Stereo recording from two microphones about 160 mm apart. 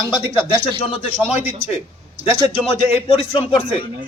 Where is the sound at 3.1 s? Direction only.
35° left (ahead or behind).